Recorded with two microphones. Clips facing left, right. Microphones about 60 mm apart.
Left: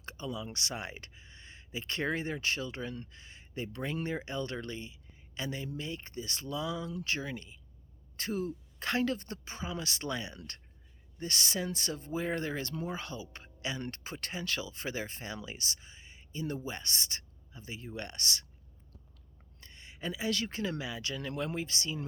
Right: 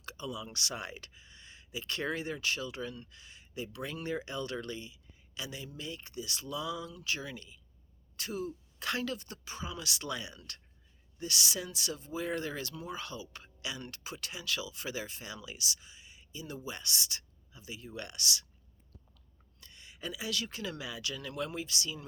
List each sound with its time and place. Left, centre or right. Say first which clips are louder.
0.0 s a sound: left 1 dB; left
0.5 s speech: even; left
19.5 s speech: left 2 dB; left